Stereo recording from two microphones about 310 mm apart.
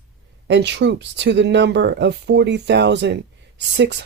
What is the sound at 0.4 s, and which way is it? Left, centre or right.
Speech, right.